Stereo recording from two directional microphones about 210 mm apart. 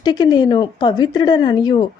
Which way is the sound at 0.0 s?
20° left (ahead or behind).